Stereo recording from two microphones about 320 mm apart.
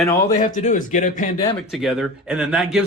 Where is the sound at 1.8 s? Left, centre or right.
Centre.